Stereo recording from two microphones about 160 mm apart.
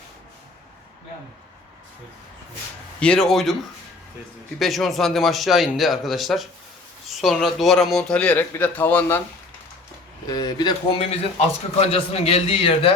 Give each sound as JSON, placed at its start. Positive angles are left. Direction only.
{"t": 3.0, "sound": "speech", "side_deg": 5}
{"t": 4.6, "sound": "speech", "side_deg": 0}
{"t": 10.2, "sound": "a man's voice", "side_deg": 25}